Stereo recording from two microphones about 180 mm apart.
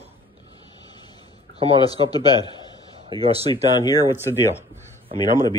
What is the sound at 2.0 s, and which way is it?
Speech, 25° left (ahead or behind).